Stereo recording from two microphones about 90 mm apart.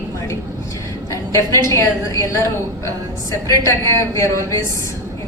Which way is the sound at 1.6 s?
30° left (ahead or behind).